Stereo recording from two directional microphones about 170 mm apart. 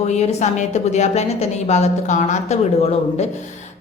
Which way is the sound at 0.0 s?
40° left (ahead or behind).